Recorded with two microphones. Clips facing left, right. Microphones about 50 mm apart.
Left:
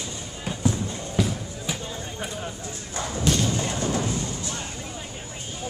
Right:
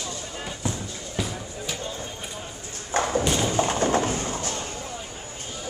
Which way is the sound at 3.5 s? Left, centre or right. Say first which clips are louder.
Right 4 dB; right.